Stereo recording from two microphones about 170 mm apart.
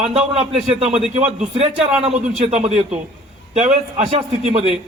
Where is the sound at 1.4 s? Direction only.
40° right (ahead or behind).